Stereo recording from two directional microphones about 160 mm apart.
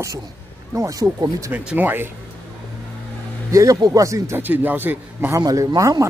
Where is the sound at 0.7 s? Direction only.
20° right (ahead or behind).